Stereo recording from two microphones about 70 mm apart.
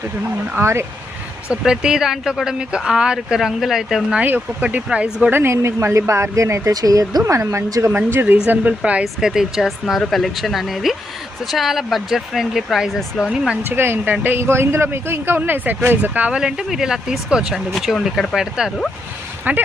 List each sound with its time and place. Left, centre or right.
0.6 s a man's voice: right
1.6 s speech: centre
4.2 s speech: right
4.9 s speech: centre
5.3 s speech: right
7.9 s a man's voice: right
8.4 s speech: right; by 13.2 s centre
13.7 s a man's voice: right; by 18.4 s centre
19.5 s speech: right